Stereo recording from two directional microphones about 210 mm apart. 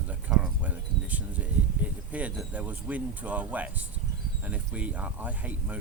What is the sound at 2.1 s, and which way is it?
Speech, 5° right (ahead or behind).